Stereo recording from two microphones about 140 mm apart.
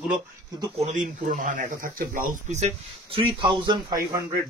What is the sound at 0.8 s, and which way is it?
Speech, 65° right (ahead or behind).